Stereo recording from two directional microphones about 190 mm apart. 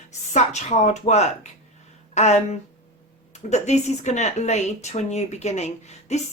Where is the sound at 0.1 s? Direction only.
35° left (ahead or behind).